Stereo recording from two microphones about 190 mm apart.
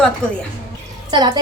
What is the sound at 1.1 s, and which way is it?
Speech, 25° right (ahead or behind).